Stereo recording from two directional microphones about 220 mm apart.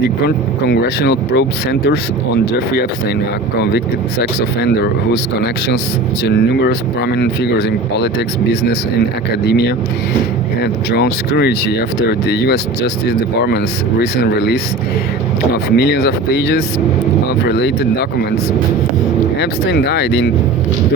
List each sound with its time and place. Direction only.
0.3 s speech: 50° left (ahead or behind)
4.2 s speech: 50° left (ahead or behind)
6.2 s speech: 50° left (ahead or behind)
9.5 s speech: 50° left (ahead or behind)
15.7 s speech: 50° left (ahead or behind)
19.4 s speech: 50° left (ahead or behind)